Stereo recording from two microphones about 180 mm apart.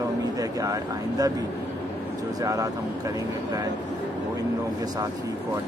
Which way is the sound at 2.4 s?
20° right (ahead or behind).